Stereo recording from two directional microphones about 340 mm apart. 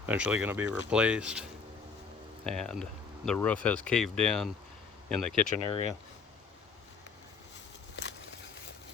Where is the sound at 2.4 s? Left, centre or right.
Centre.